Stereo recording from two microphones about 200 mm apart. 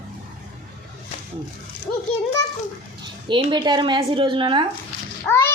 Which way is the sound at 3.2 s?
25° right (ahead or behind).